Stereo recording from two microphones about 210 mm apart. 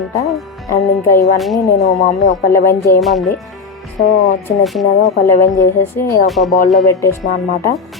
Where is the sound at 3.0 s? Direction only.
Centre (ahead or behind).